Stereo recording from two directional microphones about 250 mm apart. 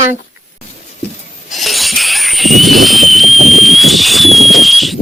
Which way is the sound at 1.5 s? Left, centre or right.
Centre.